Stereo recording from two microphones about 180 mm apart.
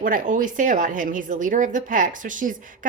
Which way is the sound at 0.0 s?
50° right (ahead or behind).